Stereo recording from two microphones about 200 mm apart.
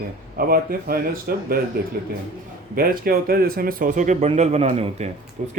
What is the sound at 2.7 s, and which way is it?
Speech, 45° right (ahead or behind).